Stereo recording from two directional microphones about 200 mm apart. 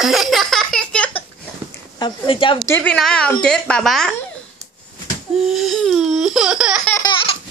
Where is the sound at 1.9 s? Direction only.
25° left (ahead or behind).